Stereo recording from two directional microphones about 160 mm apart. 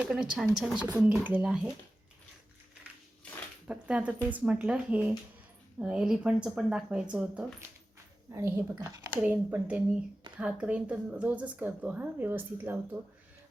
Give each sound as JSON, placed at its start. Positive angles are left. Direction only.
{"t": 0.0, "sound": "speech", "side_deg": -5}
{"t": 3.7, "sound": "speech", "side_deg": -5}
{"t": 8.3, "sound": "speech", "side_deg": -15}